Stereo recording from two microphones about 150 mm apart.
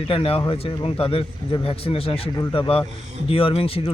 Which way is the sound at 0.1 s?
40° left (ahead or behind).